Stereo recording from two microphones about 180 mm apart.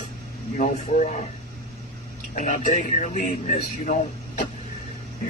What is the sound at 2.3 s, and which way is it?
Speech, 45° left (ahead or behind).